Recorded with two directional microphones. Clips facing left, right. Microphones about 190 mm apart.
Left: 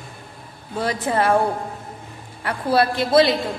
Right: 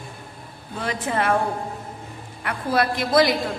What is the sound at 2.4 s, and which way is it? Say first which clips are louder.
Speech: left 3 dB; 30° left (ahead or behind).